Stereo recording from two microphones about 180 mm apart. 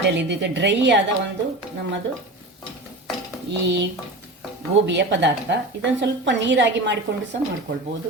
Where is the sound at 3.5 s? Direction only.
75° right (ahead or behind).